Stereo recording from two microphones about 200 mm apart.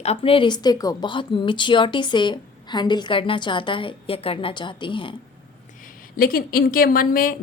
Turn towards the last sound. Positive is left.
turn(degrees=45)  # may be behind; listen again after turning